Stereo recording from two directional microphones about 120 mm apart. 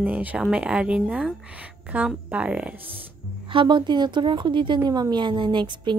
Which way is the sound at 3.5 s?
40° right (ahead or behind).